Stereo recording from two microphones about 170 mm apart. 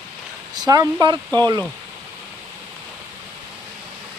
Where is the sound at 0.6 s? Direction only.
20° right (ahead or behind).